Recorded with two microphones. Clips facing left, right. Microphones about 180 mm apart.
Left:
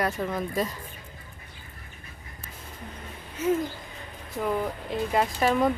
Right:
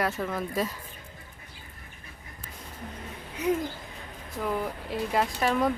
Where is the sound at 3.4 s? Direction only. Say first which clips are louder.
Left 2 dB; 15° right (ahead or behind).